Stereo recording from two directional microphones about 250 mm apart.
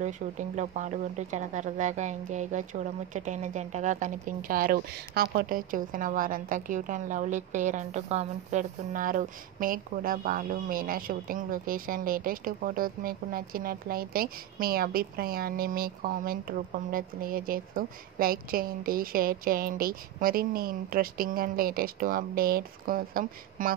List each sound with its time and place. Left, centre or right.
0.0 s speech: right